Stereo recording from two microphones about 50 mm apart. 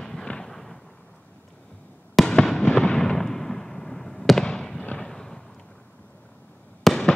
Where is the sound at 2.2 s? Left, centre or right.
Centre.